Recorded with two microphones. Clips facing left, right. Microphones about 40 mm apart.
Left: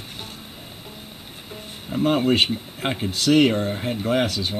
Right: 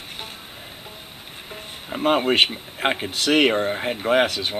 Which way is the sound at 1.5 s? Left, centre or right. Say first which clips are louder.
Left 2 dB; right.